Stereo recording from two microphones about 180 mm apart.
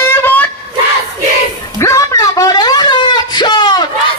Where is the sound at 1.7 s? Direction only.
15° left (ahead or behind).